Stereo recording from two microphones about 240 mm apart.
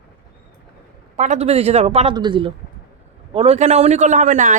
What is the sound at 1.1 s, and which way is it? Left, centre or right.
Speech, right.